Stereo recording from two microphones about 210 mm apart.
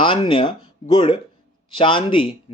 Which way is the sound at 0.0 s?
25° left (ahead or behind).